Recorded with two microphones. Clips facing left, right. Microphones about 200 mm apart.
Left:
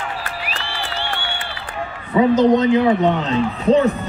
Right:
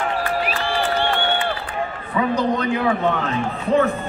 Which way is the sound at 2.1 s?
25° left (ahead or behind).